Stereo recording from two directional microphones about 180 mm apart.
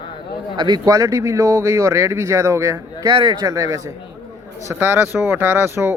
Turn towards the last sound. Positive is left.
turn(degrees=-15)  # may be behind; listen again after turning